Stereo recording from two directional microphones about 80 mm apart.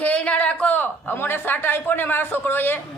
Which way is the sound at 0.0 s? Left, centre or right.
Centre.